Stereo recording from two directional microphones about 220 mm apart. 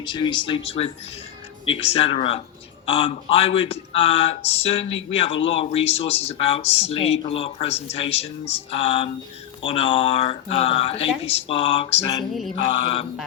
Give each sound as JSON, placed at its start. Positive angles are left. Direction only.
{"t": 0.0, "sound": "speech", "side_deg": 20}
{"t": 12.3, "sound": "mantra", "side_deg": 0}